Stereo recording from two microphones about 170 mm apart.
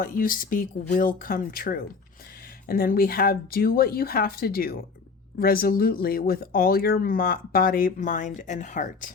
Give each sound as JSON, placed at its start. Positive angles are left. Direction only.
{"t": 0.0, "sound": "speech", "side_deg": 55}